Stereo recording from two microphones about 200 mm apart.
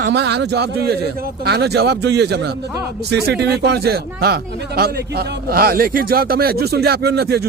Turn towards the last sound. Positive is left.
turn(degrees=-55)  # may be behind; listen again after turning